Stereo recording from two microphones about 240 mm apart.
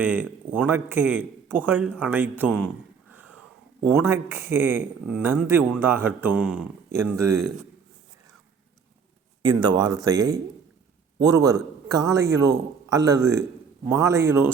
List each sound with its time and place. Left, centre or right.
0.0 s speech: centre
3.1 s a sound: centre
3.9 s speech: centre
9.4 s speech: centre